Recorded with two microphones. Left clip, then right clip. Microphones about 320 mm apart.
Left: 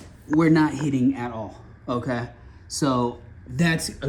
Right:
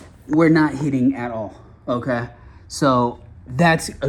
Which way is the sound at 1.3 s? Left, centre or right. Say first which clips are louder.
Right 6 dB; right.